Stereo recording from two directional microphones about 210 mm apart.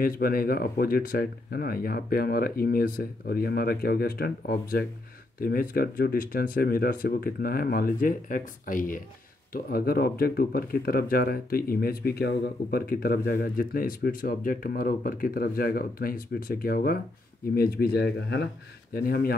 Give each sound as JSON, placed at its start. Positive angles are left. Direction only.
{"t": 0.0, "sound": "speech", "side_deg": 45}